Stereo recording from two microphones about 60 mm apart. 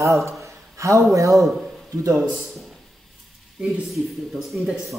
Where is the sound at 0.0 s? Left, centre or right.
Right.